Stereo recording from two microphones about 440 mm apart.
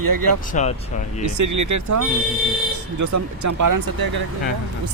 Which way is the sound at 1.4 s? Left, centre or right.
Right.